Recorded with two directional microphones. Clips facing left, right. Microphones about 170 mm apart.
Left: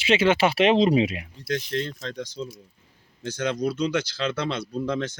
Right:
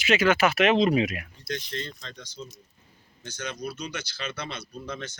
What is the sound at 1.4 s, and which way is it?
Speech, 90° left.